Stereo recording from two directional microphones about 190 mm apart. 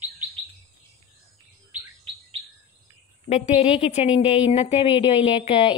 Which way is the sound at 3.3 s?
35° left (ahead or behind).